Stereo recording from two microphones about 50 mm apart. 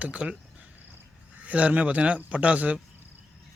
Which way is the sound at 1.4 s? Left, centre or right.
Right.